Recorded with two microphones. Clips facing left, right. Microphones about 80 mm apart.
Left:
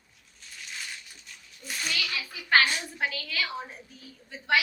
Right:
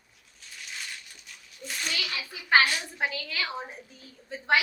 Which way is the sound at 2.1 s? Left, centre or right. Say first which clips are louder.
Right 1 dB; right.